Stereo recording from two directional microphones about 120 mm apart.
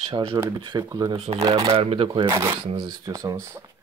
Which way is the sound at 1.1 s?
55° right (ahead or behind).